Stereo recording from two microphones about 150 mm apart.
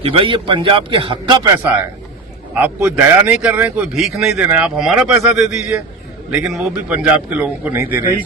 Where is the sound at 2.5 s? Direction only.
10° right (ahead or behind).